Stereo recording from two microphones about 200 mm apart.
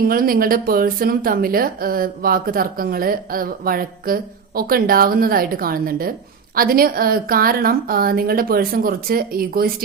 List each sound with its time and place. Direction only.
0.1 s a woman's voice: 45° right (ahead or behind)